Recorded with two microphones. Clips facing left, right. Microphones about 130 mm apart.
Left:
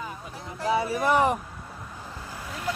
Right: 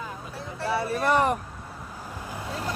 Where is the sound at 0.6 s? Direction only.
15° left (ahead or behind).